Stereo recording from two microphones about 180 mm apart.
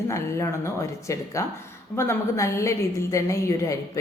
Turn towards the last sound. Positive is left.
turn(degrees=15)  # may be behind; listen again after turning